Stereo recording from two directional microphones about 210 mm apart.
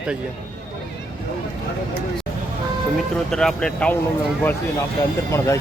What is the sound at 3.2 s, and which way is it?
Speech, centre (ahead or behind).